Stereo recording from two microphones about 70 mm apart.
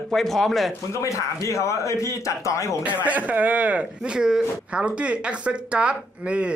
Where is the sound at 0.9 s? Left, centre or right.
Left.